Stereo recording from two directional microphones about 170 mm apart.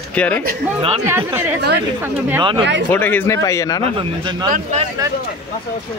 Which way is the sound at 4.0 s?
25° right (ahead or behind).